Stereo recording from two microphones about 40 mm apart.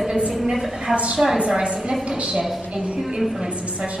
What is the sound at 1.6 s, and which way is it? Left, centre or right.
Speech, right.